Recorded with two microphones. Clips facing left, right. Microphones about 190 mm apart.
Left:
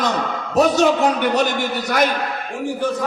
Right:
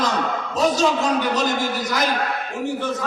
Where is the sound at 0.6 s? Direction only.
65° left (ahead or behind).